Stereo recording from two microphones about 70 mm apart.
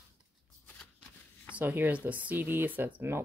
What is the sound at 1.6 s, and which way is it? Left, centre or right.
Speech, right.